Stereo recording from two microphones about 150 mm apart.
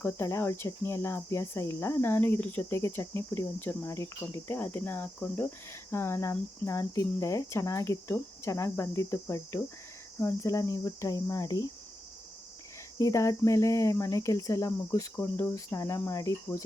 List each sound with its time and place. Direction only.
0.0 s cricket: 20° left (ahead or behind)
10.2 s speech: 20° left (ahead or behind)
13.0 s speech: 20° left (ahead or behind)